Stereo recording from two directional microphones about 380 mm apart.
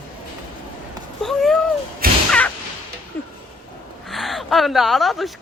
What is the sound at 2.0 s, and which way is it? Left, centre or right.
Whip, right.